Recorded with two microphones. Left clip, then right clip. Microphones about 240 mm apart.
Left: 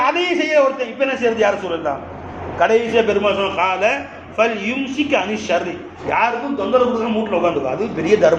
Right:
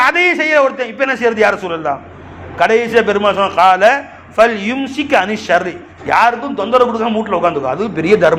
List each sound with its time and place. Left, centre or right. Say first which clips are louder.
0.0 s a man's voice: right 6 dB; right